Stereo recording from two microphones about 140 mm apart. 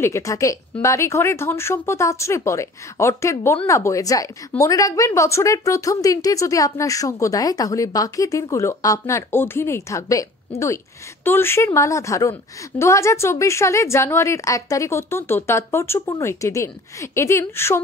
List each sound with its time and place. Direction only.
0.0 s a woman's voice: 20° left (ahead or behind)
11.2 s a woman's voice: 15° left (ahead or behind)